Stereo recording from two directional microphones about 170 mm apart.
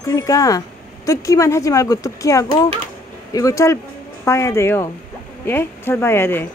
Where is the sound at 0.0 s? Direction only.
20° left (ahead or behind).